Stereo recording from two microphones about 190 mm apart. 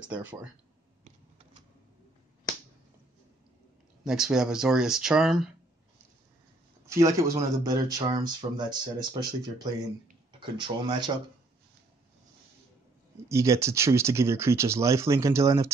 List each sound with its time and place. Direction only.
0.1 s speech: 5° right (ahead or behind)
4.0 s speech: 5° right (ahead or behind)
6.9 s speech: 15° right (ahead or behind)
13.3 s speech: 15° right (ahead or behind)